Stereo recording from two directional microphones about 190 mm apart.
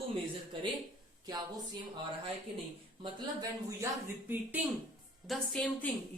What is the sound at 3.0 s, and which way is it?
Speech, 20° right (ahead or behind).